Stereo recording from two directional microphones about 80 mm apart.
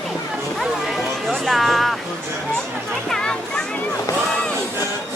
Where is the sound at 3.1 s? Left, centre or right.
Centre.